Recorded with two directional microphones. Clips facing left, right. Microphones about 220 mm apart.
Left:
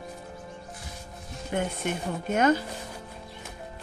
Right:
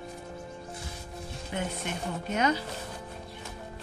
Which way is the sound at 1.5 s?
50° left (ahead or behind).